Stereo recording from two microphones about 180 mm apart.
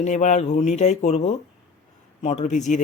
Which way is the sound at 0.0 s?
40° left (ahead or behind).